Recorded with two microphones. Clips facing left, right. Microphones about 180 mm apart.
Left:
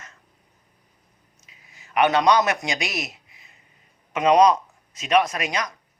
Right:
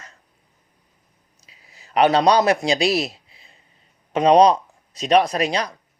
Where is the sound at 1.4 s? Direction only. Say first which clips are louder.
Right 3 dB; 35° right (ahead or behind).